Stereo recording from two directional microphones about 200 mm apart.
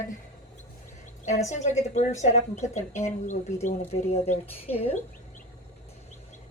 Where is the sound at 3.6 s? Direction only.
30° left (ahead or behind).